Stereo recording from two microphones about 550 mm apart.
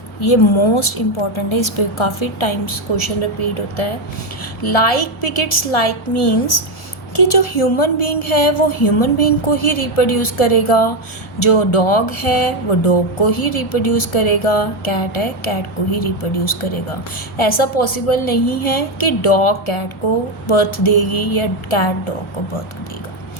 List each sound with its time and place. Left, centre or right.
0.2 s a woman's voice: left
4.6 s speech: left
7.2 s speech: left
20.5 s speech: left